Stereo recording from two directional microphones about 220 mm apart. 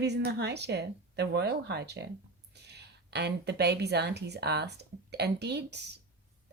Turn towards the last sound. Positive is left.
turn(degrees=-50)  # may be behind; listen again after turning